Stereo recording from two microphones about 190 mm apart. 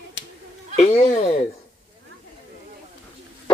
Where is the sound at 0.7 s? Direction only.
40° left (ahead or behind).